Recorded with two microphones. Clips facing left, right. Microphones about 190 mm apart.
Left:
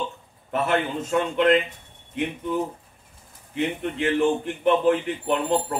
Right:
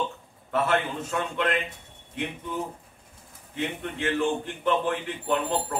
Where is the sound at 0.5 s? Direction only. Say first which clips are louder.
Left 2 dB; 20° left (ahead or behind).